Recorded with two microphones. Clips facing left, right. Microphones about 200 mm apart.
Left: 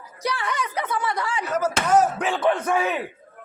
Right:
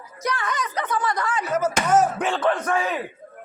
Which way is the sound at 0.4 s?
10° left (ahead or behind).